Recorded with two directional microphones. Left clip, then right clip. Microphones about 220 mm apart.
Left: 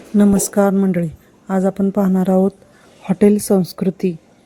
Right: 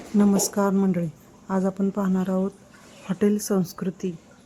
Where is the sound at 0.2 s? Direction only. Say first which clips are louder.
Left 7 dB; 20° left (ahead or behind).